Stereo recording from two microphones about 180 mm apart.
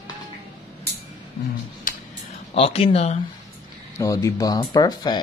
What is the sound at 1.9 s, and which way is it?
Music, 50° left (ahead or behind).